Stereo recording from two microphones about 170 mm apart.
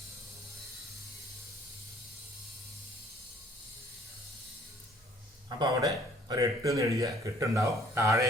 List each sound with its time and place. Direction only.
5.5 s speech: 25° right (ahead or behind)